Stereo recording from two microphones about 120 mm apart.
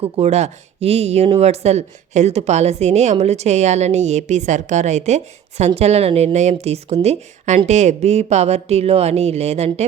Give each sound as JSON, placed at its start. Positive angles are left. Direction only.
{"t": 0.2, "sound": "speech", "side_deg": -70}